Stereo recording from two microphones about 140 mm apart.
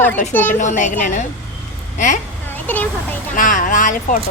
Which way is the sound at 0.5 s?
65° left (ahead or behind).